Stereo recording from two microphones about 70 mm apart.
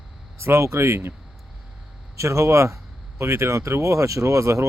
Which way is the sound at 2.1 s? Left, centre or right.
Right.